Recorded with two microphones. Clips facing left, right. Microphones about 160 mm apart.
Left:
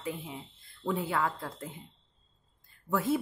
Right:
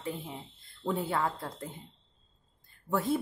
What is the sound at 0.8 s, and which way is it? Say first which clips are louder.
Speech: even; 35° right (ahead or behind).